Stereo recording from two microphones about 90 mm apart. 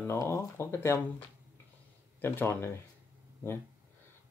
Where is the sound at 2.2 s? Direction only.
25° left (ahead or behind).